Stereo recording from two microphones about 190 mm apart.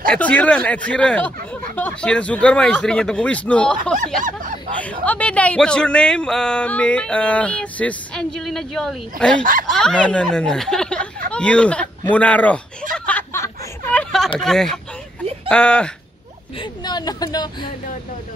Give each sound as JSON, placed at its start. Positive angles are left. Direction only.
{"t": 0.1, "sound": "speech", "side_deg": 5}
{"t": 4.2, "sound": "speech", "side_deg": -45}
{"t": 4.7, "sound": "speech", "side_deg": 5}
{"t": 9.4, "sound": "speech", "side_deg": -45}
{"t": 9.7, "sound": "speech", "side_deg": 0}
{"t": 12.9, "sound": "snicker", "side_deg": 5}
{"t": 13.9, "sound": "a sound", "side_deg": 0}
{"t": 14.4, "sound": "speech", "side_deg": 0}
{"t": 16.5, "sound": "a woman's voice", "side_deg": 20}